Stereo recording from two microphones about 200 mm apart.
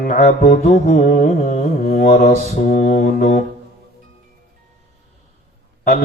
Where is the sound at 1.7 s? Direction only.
55° left (ahead or behind).